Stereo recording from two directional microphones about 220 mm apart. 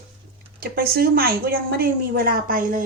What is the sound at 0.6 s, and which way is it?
A woman's voice, 45° right (ahead or behind).